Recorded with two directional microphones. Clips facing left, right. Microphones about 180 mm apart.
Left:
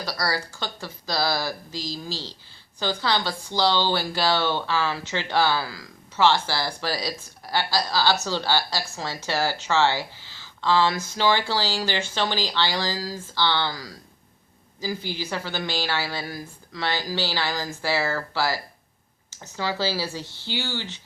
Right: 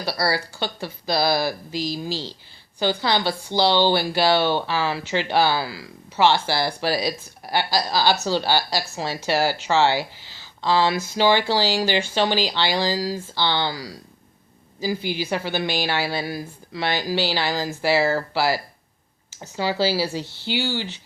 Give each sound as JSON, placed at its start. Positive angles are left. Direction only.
{"t": 0.0, "sound": "speech", "side_deg": -15}